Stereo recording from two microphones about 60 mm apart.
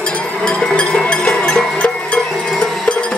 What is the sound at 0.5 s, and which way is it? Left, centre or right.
Music, centre.